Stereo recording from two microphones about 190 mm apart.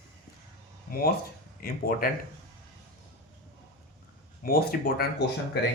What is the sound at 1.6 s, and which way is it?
Speech, 50° left (ahead or behind).